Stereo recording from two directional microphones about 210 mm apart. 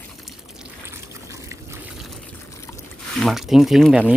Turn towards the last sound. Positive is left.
turn(degrees=-5)  # may be behind; listen again after turning